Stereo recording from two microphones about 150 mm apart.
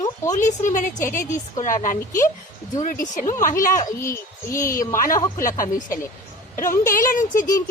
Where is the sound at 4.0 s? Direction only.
20° left (ahead or behind).